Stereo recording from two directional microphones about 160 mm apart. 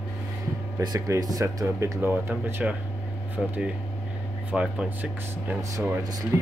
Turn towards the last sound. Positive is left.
turn(degrees=-20)  # may be behind; listen again after turning